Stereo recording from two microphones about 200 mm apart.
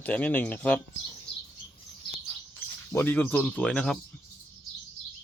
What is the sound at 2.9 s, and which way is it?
Speech, 10° left (ahead or behind).